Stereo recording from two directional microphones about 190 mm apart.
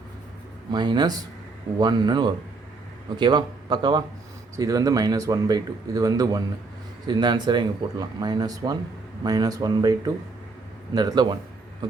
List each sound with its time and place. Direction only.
0.7 s speech: 20° right (ahead or behind)